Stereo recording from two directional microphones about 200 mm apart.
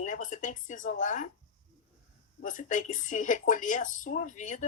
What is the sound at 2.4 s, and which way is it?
Speech, 40° left (ahead or behind).